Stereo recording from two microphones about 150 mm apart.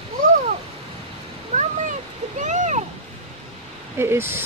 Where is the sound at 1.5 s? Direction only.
55° right (ahead or behind).